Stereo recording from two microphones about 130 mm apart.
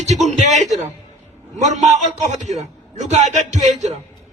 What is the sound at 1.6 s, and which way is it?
A man's voice, 65° right (ahead or behind).